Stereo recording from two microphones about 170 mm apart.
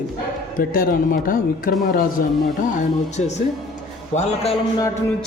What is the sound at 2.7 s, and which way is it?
A man's voice, 45° left (ahead or behind).